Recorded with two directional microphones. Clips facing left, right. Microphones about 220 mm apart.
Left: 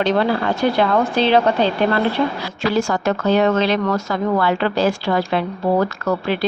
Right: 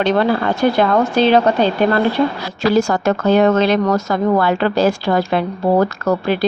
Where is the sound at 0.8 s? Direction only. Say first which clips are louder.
Right 3 dB; 45° right (ahead or behind).